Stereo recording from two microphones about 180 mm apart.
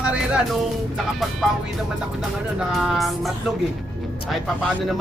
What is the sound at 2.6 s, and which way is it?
Music, centre (ahead or behind).